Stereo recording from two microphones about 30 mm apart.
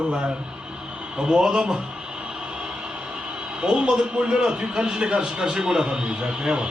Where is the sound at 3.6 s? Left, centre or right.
Right.